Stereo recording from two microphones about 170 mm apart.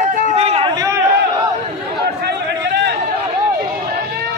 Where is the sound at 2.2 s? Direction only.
90° right.